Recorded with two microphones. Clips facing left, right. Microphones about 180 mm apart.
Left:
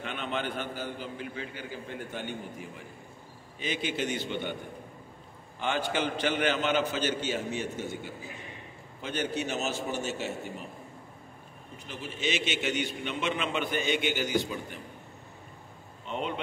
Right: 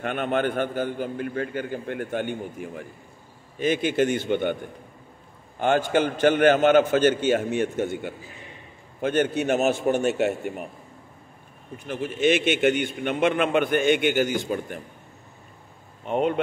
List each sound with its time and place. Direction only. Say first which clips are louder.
0.0 s a man's voice: right 9 dB; 55° right (ahead or behind)
5.6 s a man's voice: right 9 dB; 50° right (ahead or behind)
11.9 s a man's voice: right 11 dB; 55° right (ahead or behind)
16.1 s a man's voice: right 10 dB; 50° right (ahead or behind)